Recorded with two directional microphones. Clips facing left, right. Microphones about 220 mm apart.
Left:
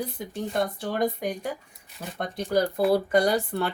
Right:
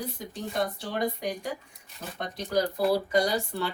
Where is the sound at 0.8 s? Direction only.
50° left (ahead or behind).